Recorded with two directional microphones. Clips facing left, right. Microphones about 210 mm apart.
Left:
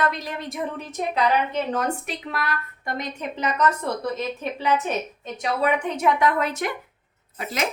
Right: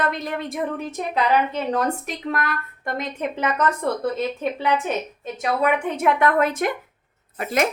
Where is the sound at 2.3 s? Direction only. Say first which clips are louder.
Right 2 dB; 50° right (ahead or behind).